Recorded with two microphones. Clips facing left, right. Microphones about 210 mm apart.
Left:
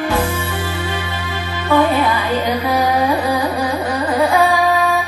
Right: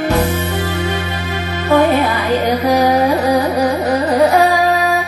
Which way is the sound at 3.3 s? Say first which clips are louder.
Right 4 dB; 40° right (ahead or behind).